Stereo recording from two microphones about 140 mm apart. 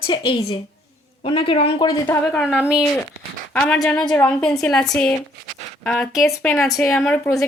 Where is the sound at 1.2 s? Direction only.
40° left (ahead or behind).